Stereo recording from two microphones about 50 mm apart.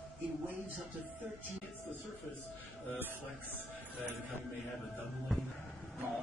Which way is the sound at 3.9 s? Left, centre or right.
Right.